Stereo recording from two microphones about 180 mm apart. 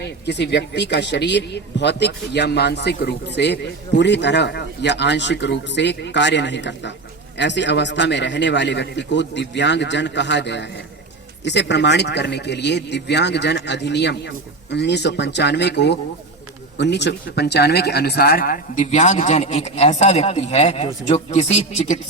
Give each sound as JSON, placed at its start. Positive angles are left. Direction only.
{"t": 0.3, "sound": "a man's voice", "side_deg": 75}